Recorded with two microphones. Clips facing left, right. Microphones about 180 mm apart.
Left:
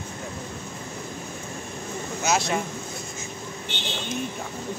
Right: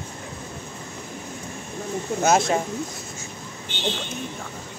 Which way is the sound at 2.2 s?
50° right (ahead or behind).